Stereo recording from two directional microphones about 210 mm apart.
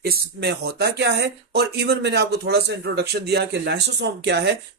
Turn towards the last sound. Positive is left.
turn(degrees=-55)  # may be behind; listen again after turning